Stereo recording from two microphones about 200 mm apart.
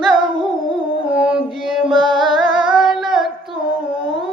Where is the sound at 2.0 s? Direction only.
Centre (ahead or behind).